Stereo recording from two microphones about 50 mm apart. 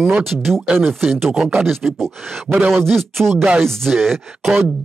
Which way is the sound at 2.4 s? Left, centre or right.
Right.